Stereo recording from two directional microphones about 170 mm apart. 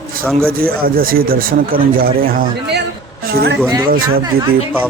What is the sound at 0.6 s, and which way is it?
A man's voice, 60° right (ahead or behind).